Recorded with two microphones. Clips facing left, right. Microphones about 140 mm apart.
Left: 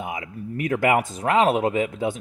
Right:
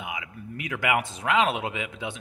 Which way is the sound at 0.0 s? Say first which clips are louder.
Left 5 dB; 45° left (ahead or behind).